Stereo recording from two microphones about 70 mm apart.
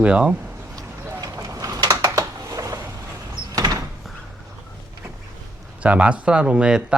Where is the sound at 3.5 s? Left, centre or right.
Right.